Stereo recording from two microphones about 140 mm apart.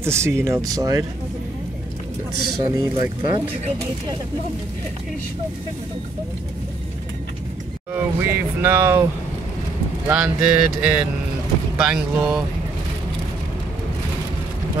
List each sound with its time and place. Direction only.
0.0 s speech: 20° right (ahead or behind)
2.6 s speech: 30° right (ahead or behind)
7.9 s speech: 15° right (ahead or behind)
10.0 s speech: 5° right (ahead or behind)